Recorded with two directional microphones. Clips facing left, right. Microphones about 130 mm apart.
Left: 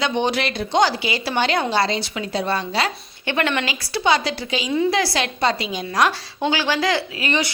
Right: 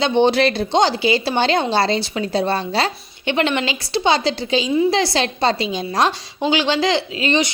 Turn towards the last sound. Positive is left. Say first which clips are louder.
# right 4 dB
turn(degrees=-25)  # may be behind; listen again after turning